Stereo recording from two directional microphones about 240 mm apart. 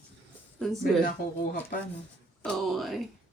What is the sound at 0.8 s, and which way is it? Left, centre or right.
Speech, left.